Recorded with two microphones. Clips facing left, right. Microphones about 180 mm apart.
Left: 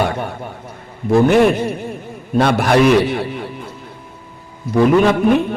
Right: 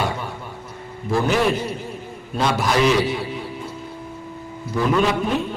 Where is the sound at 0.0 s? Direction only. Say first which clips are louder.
Left 6 dB; 60° left (ahead or behind).